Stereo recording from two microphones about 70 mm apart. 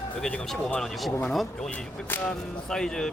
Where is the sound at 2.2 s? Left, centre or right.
Centre.